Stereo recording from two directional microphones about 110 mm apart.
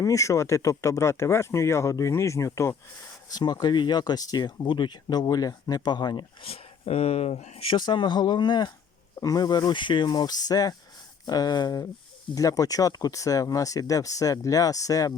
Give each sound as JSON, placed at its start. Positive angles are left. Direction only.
{"t": 0.0, "sound": "speech", "side_deg": 30}
{"t": 3.3, "sound": "speech", "side_deg": 40}
{"t": 6.4, "sound": "speech", "side_deg": 65}
{"t": 7.7, "sound": "speech", "side_deg": 45}